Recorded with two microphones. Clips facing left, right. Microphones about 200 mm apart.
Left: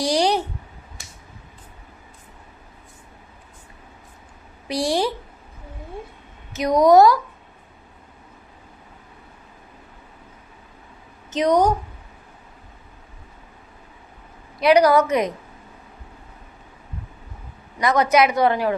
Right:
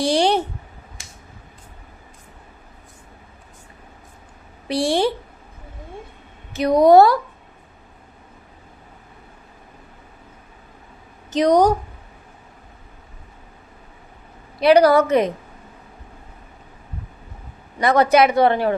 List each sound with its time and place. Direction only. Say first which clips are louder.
0.0 s speech: right 2 dB; 25° right (ahead or behind)
4.7 s speech: right 3 dB; 30° right (ahead or behind)
6.5 s a woman's voice: right 2 dB; 30° right (ahead or behind)
11.3 s a woman's voice: right 3 dB; 35° right (ahead or behind)
14.6 s a woman's voice: right 2 dB; 30° right (ahead or behind)
17.7 s speech: right 2 dB; 30° right (ahead or behind)